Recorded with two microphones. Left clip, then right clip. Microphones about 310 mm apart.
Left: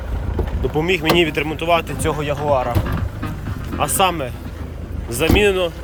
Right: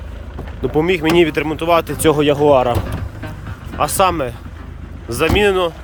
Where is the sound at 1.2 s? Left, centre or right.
Centre.